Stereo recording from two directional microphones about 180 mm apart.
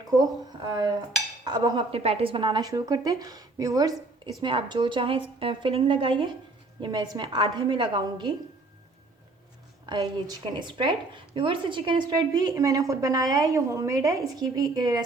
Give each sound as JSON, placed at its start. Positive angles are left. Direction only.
{"t": 0.7, "sound": "a woman's voice", "side_deg": -20}
{"t": 9.8, "sound": "a woman's voice", "side_deg": -20}